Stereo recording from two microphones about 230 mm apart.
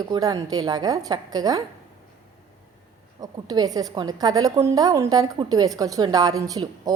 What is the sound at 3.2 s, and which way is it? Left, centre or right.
A woman's voice, centre.